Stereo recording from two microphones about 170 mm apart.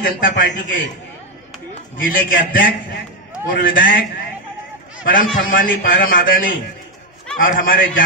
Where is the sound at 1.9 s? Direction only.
55° left (ahead or behind).